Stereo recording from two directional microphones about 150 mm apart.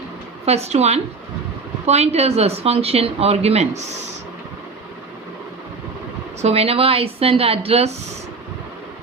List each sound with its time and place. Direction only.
0.4 s speech: 45° right (ahead or behind)
6.4 s a woman's voice: 40° right (ahead or behind)